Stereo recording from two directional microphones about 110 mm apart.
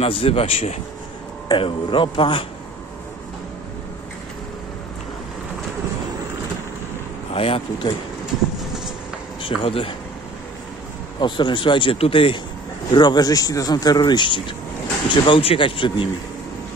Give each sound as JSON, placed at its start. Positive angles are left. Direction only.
{"t": 0.0, "sound": "a man's voice", "side_deg": 60}
{"t": 1.5, "sound": "speech", "side_deg": 50}
{"t": 7.3, "sound": "a man's voice", "side_deg": 60}
{"t": 9.6, "sound": "a man's voice", "side_deg": 55}
{"t": 11.1, "sound": "speech", "side_deg": 45}
{"t": 12.9, "sound": "speech", "side_deg": 40}